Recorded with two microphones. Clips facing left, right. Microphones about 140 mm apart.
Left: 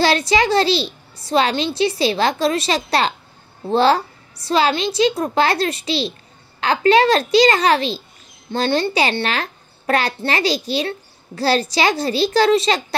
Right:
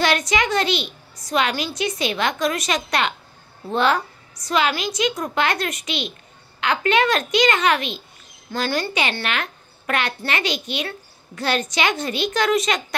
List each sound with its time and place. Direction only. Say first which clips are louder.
0.0 s a child's voice: left 4 dB; 30° left (ahead or behind)